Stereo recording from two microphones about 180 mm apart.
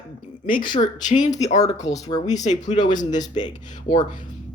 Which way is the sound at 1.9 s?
20° left (ahead or behind).